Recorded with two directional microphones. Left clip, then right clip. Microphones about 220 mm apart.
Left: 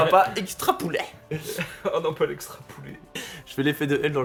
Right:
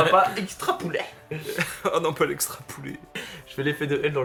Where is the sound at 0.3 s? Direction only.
40° left (ahead or behind).